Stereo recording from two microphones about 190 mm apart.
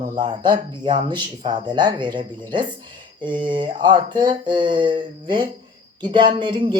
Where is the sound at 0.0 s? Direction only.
25° right (ahead or behind).